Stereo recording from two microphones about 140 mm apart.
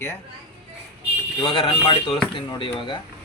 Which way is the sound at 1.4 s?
35° left (ahead or behind).